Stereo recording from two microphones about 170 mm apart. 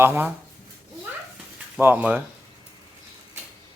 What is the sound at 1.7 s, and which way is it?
Speech, 10° right (ahead or behind).